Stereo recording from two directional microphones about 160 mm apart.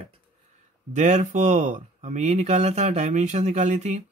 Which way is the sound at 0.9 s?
50° right (ahead or behind).